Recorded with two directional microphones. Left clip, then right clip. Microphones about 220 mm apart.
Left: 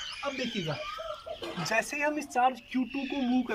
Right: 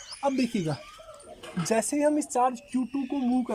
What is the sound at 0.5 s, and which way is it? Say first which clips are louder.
Speech: right 4 dB; 40° right (ahead or behind).